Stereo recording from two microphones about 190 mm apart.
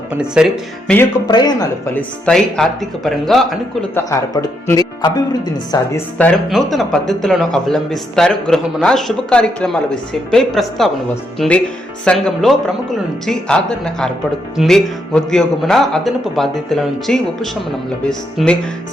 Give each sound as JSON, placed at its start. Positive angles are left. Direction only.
{"t": 0.2, "sound": "a man's voice", "side_deg": 0}
{"t": 1.3, "sound": "speech", "side_deg": 20}
{"t": 2.0, "sound": "a man's voice", "side_deg": 5}
{"t": 3.9, "sound": "speech", "side_deg": 15}
{"t": 6.1, "sound": "a man's voice", "side_deg": 5}